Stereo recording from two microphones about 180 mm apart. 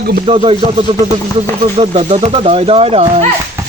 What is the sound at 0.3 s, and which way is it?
Speech, 30° right (ahead or behind).